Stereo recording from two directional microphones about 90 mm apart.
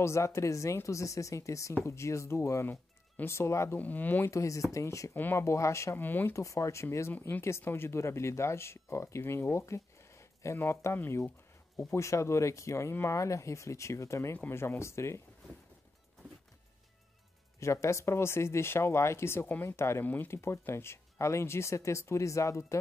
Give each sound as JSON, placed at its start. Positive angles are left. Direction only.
{"t": 0.0, "sound": "speech", "side_deg": 30}
{"t": 3.7, "sound": "speech", "side_deg": 20}
{"t": 4.3, "sound": "speech", "side_deg": 35}
{"t": 5.1, "sound": "speech", "side_deg": 20}
{"t": 5.4, "sound": "speech", "side_deg": 30}
{"t": 6.3, "sound": "speech", "side_deg": 35}
{"t": 17.6, "sound": "speech", "side_deg": 35}